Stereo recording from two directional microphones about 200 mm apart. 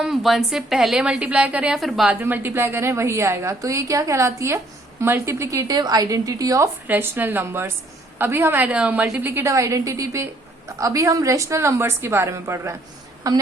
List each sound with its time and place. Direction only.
0.0 s a woman's voice: centre (ahead or behind); by 13.4 s 15° right (ahead or behind)